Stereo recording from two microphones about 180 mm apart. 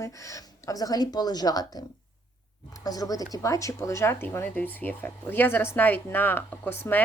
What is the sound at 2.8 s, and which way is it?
Speech, 20° left (ahead or behind).